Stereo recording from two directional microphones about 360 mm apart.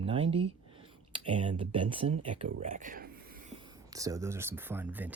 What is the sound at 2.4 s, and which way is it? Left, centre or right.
Speech, centre.